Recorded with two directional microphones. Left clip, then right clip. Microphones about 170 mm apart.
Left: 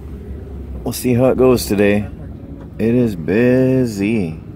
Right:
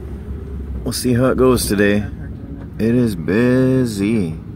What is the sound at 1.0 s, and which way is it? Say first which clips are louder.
Speech: left 2 dB; 5° left (ahead or behind).